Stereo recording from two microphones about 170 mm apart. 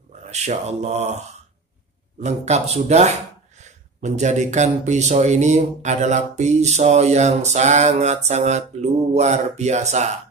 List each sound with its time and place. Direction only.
0.3 s speech: 40° right (ahead or behind)